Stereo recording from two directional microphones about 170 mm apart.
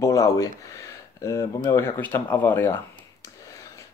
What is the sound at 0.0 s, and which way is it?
Speech, 20° left (ahead or behind).